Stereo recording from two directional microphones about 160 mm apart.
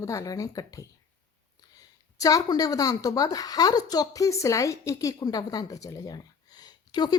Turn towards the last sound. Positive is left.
turn(degrees=25)  # may be behind; listen again after turning